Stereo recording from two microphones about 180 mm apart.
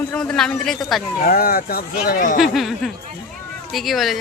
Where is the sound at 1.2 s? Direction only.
55° left (ahead or behind).